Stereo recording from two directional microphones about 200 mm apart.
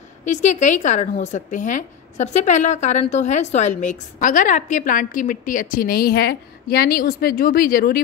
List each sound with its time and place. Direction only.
0.2 s a woman's voice: 35° left (ahead or behind)